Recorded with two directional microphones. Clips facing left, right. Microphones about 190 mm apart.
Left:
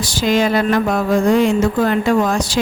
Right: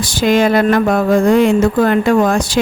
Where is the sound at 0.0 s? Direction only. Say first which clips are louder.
Right 3 dB; 55° right (ahead or behind).